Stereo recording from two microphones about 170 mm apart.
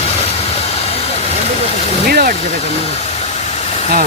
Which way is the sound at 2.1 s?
65° right (ahead or behind).